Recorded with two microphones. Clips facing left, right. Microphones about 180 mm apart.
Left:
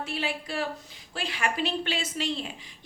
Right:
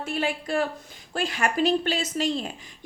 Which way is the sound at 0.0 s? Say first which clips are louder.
Right 4 dB; 50° right (ahead or behind).